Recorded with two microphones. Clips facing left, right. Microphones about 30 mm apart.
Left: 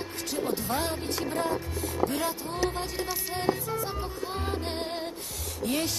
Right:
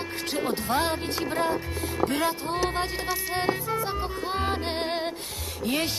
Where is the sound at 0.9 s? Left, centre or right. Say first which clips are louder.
Right 3 dB; right.